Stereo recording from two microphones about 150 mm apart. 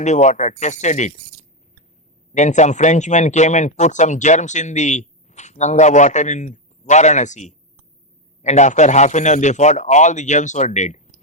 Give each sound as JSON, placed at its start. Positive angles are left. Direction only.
{"t": 0.0, "sound": "a man's voice", "side_deg": 50}